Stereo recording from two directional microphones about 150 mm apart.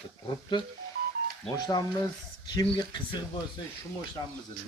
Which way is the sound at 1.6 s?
25° left (ahead or behind).